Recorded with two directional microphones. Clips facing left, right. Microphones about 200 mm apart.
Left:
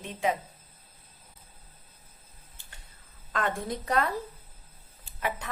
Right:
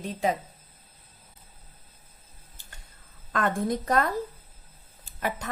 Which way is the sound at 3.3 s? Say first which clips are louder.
Right 4 dB; 45° right (ahead or behind).